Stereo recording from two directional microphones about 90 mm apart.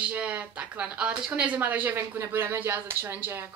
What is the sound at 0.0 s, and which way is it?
Speech, 15° right (ahead or behind).